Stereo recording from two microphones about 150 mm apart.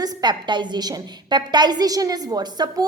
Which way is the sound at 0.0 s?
30° right (ahead or behind).